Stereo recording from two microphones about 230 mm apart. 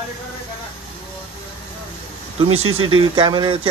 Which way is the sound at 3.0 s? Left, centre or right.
Right.